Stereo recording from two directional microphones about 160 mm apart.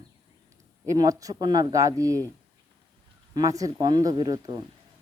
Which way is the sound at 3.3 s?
20° right (ahead or behind).